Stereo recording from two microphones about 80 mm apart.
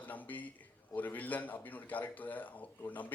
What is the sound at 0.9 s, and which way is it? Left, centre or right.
A man's voice, left.